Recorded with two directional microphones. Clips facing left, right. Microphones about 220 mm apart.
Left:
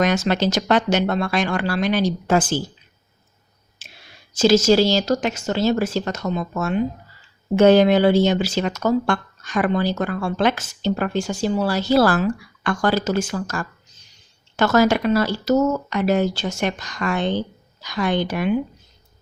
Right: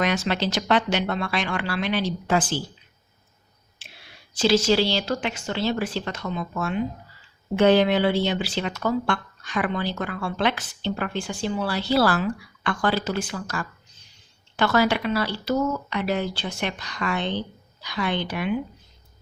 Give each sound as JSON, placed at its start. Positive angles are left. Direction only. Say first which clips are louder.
{"t": 0.0, "sound": "speech", "louder": "left 5 dB", "side_deg": 45}
{"t": 3.8, "sound": "whispering", "louder": "left 1 dB", "side_deg": 45}
{"t": 4.4, "sound": "speech", "louder": "left 5 dB", "side_deg": 45}